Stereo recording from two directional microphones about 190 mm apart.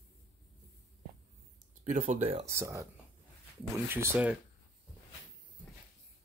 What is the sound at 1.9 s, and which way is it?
Speech, 40° right (ahead or behind).